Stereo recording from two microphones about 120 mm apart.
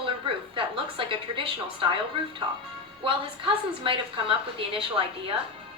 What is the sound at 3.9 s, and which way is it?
Speech, 45° right (ahead or behind).